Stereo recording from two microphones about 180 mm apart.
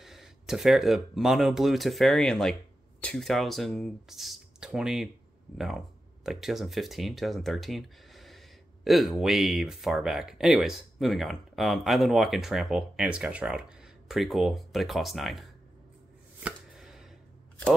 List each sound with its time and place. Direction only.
0.0 s speech: centre (ahead or behind)
16.3 s chopping: 5° right (ahead or behind)